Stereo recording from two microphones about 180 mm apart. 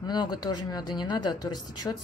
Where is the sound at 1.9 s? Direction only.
10° left (ahead or behind).